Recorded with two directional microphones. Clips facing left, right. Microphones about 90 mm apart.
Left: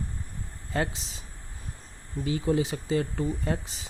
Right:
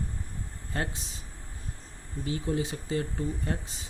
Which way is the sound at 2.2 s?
90° left.